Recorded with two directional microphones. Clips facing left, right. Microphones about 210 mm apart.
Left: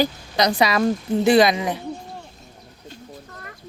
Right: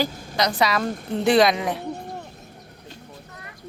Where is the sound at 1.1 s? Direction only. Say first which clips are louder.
Left 1 dB; centre (ahead or behind).